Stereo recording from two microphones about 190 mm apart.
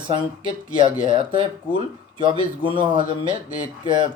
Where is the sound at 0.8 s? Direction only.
25° right (ahead or behind).